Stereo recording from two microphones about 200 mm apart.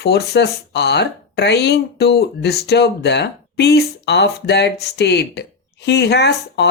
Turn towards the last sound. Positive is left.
turn(degrees=55)  # may be behind; listen again after turning